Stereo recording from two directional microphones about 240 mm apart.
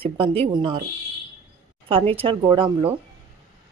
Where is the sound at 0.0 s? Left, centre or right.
Right.